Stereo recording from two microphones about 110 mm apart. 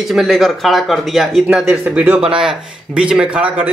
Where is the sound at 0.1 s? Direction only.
Centre (ahead or behind).